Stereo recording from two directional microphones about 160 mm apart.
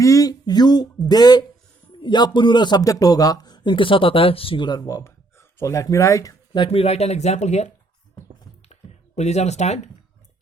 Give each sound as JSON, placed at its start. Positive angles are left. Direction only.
{"t": 0.0, "sound": "speech", "side_deg": 20}
{"t": 8.7, "sound": "computer keyboard", "side_deg": 45}